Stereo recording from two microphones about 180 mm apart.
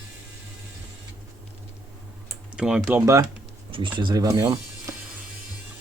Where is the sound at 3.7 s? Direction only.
25° right (ahead or behind).